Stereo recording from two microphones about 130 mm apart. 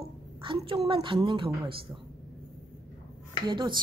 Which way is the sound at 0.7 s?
45° right (ahead or behind).